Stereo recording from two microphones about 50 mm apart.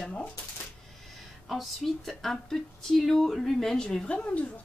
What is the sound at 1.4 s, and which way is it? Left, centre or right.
Speech, centre.